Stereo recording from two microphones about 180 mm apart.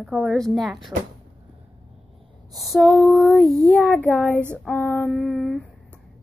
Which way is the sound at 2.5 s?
Centre (ahead or behind).